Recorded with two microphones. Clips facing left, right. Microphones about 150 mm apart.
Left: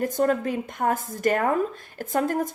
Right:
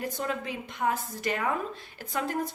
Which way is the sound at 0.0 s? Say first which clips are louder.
Left 10 dB; 45° left (ahead or behind).